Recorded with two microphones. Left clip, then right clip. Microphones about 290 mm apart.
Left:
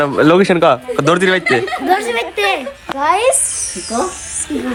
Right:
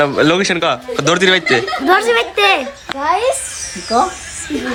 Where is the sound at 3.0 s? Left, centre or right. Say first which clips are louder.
Left 2 dB; left.